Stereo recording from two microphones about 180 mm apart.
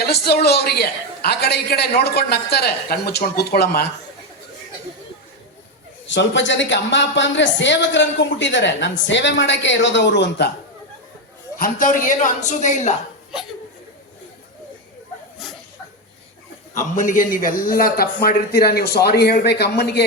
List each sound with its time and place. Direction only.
0.0 s a man's voice: 60° left (ahead or behind)
6.1 s a woman's voice: 90° left; by 10.5 s 70° left (ahead or behind)
11.6 s a woman's voice: 45° left (ahead or behind)
16.7 s a man's voice: 45° left (ahead or behind); by 20.1 s 65° left (ahead or behind)